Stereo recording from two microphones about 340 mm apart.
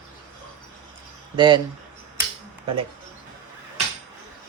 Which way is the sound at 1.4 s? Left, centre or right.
Centre.